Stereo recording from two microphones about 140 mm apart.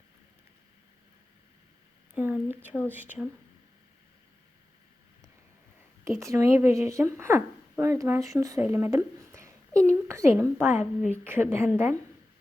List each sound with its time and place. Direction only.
2.1 s a woman's voice: 10° right (ahead or behind)
6.1 s a woman's voice: 20° right (ahead or behind)